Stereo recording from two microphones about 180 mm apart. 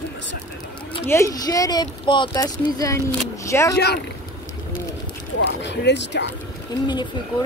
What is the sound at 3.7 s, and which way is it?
Speech, 65° left (ahead or behind).